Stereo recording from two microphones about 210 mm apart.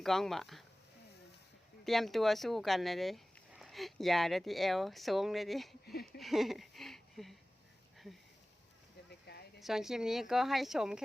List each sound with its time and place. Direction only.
0.0 s speech: centre (ahead or behind)
1.8 s speech: centre (ahead or behind)
5.8 s a sound: 50° left (ahead or behind)
6.1 s speech: centre (ahead or behind)
9.6 s speech: centre (ahead or behind)